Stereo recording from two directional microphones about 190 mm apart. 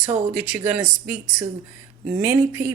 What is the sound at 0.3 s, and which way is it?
Speech, 5° right (ahead or behind).